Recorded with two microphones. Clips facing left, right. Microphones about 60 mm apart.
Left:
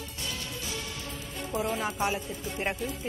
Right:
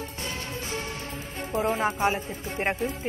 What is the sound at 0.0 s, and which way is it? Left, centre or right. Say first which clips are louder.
Speech: right 4 dB; right.